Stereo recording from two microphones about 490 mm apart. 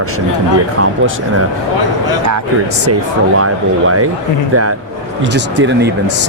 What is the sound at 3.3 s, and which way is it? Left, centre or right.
Speech, right.